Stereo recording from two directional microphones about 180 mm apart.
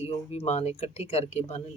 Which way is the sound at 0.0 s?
35° left (ahead or behind).